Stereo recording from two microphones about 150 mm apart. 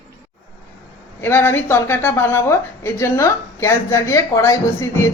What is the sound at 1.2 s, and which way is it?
A woman's voice, 15° left (ahead or behind).